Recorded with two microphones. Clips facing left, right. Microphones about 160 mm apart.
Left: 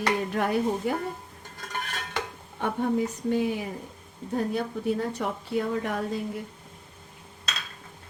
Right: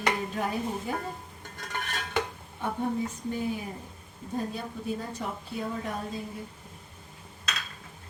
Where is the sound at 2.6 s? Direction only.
85° left.